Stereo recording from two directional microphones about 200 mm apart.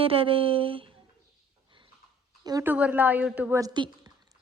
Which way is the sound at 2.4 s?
15° right (ahead or behind).